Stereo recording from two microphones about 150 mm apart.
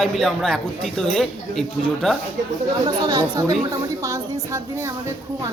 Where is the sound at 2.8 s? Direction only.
25° right (ahead or behind).